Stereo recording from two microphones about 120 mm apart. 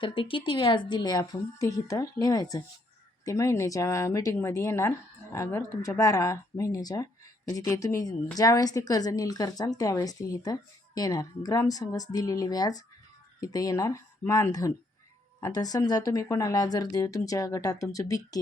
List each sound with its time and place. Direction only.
0.0 s a woman's voice: 45° left (ahead or behind); by 18.3 s 30° left (ahead or behind)